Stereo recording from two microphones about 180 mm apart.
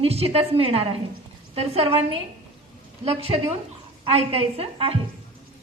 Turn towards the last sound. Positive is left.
turn(degrees=-30)  # may be behind; listen again after turning